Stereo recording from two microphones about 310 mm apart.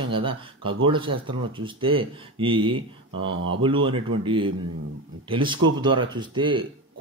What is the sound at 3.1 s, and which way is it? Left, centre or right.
Speech, right.